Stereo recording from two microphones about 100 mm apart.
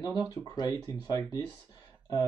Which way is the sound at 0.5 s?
40° left (ahead or behind).